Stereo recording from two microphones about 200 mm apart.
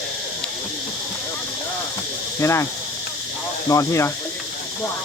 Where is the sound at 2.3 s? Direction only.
15° left (ahead or behind).